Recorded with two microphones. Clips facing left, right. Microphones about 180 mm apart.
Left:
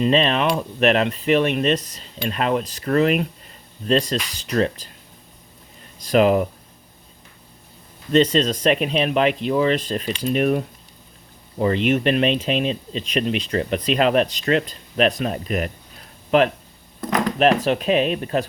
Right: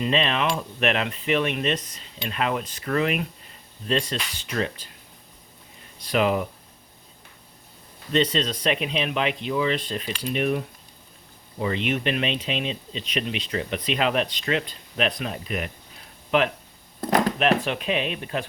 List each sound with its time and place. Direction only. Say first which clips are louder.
0.0 s speech: left 5 dB; 35° left (ahead or behind)
6.1 s speech: left 6 dB; 40° left (ahead or behind)
8.1 s speech: left 6 dB; 40° left (ahead or behind)
11.9 s speech: left 8 dB; 40° left (ahead or behind)
17.0 s a sound: even; 30° right (ahead or behind)
17.4 s speech: left 5 dB; 40° left (ahead or behind)